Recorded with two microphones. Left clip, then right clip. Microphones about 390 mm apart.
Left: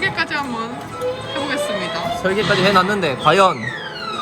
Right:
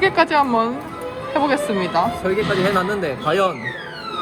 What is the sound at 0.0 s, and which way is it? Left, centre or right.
Speech, centre.